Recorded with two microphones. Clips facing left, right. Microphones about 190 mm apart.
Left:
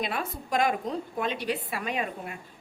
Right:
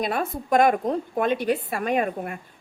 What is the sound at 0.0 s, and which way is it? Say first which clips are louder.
A woman's voice: right 6 dB; 45° right (ahead or behind).